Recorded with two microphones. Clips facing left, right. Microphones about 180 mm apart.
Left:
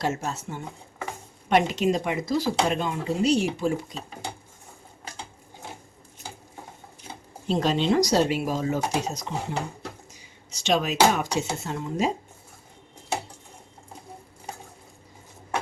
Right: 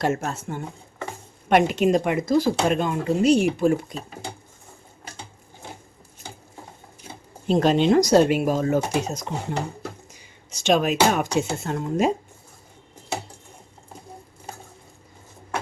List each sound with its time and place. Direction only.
0.0 s speech: 55° right (ahead or behind)
7.4 s speech: 55° right (ahead or behind)